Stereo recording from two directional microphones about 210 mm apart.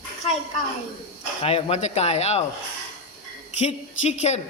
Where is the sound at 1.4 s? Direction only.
30° left (ahead or behind).